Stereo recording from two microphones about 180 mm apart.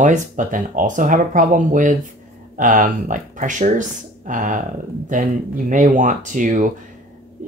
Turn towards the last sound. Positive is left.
turn(degrees=-45)  # may be behind; listen again after turning